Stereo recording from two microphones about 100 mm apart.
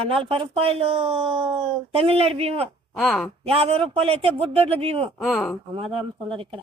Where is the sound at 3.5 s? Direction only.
80° right.